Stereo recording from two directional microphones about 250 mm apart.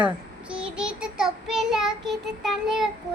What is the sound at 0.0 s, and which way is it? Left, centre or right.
Child singing, centre.